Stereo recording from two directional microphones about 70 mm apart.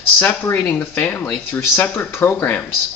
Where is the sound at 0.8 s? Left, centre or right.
Left.